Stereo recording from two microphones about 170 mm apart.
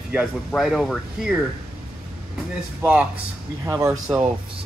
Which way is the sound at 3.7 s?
15° right (ahead or behind).